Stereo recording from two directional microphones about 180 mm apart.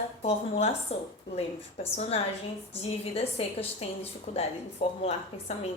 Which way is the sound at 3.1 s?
35° left (ahead or behind).